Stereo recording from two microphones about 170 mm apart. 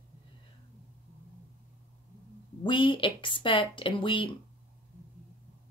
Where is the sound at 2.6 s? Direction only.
30° left (ahead or behind).